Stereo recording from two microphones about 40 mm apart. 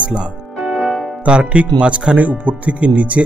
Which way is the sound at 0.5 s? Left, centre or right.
Centre.